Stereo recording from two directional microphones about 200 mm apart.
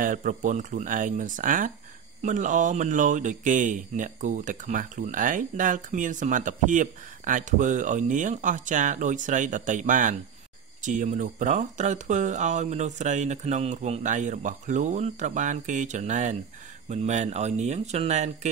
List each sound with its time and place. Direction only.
0.0 s speech: 40° right (ahead or behind)